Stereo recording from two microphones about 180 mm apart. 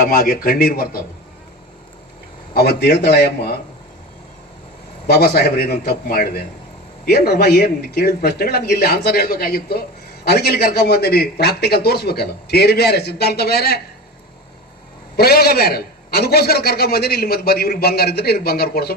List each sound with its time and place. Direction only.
0.0 s speech: 55° left (ahead or behind)
2.5 s a man's voice: 60° left (ahead or behind)
5.0 s a man's voice: 60° left (ahead or behind)
15.1 s a man's voice: 60° left (ahead or behind)